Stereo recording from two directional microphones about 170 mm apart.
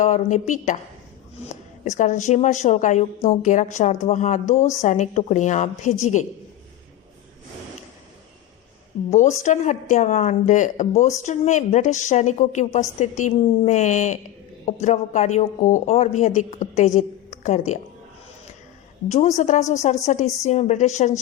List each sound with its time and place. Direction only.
0.0 s a woman's voice: 45° left (ahead or behind)
9.0 s a woman's voice: 45° left (ahead or behind)
19.0 s a woman's voice: 40° left (ahead or behind)